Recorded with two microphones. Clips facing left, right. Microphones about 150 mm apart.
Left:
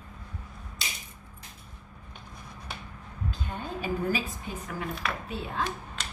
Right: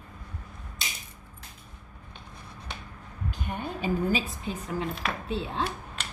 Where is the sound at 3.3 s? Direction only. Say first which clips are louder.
Right 3 dB; 15° right (ahead or behind).